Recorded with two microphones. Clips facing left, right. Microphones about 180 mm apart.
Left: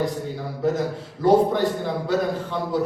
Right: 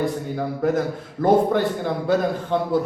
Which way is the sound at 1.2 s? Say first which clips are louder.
Even; 55° right (ahead or behind).